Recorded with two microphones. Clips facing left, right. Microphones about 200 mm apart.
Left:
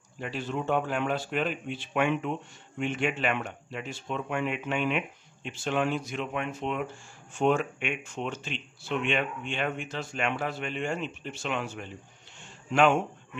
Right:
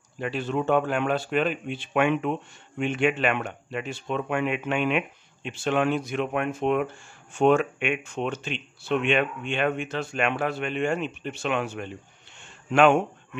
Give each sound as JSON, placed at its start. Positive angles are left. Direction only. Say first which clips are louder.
{"t": 0.2, "sound": "speech", "louder": "right 5 dB", "side_deg": -65}